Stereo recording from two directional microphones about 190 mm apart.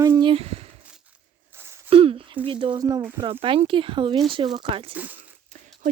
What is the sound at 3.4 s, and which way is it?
Speech, 30° right (ahead or behind).